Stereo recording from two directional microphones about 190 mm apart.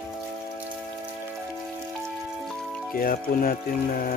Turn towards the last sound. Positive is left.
turn(degrees=50)  # may be behind; listen again after turning